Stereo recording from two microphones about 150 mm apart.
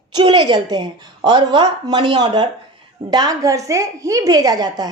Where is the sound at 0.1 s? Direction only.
30° right (ahead or behind).